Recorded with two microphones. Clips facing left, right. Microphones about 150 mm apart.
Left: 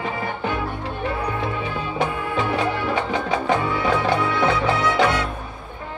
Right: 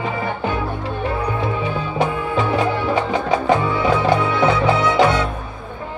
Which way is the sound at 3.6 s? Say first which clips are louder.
Right 4 dB; 25° right (ahead or behind).